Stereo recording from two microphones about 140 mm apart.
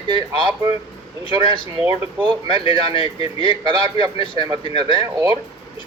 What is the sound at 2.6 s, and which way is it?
Speech, 35° left (ahead or behind).